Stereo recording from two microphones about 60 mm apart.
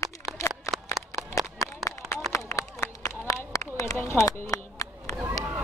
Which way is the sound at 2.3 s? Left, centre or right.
Left.